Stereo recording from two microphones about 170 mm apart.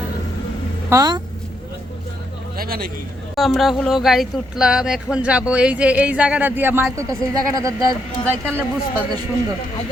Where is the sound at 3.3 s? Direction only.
Centre (ahead or behind); by 7.7 s 20° right (ahead or behind).